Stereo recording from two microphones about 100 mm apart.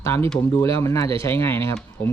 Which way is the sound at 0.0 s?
25° left (ahead or behind).